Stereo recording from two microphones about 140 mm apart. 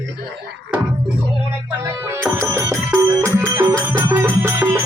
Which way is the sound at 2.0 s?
15° right (ahead or behind).